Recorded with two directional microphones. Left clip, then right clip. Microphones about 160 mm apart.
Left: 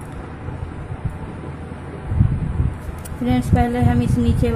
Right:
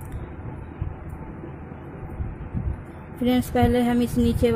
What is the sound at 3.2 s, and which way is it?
Speech, 45° right (ahead or behind).